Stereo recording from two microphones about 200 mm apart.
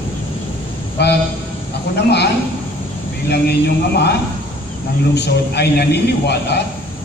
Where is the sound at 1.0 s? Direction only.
55° left (ahead or behind).